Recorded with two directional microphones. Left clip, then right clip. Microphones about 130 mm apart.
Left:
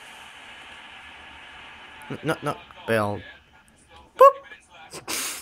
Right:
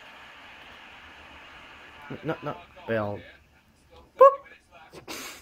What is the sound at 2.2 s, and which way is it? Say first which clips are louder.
Speech: left 6 dB; 35° left (ahead or behind).